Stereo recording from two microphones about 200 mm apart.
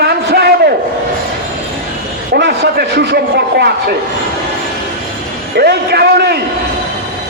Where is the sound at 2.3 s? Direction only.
55° right (ahead or behind).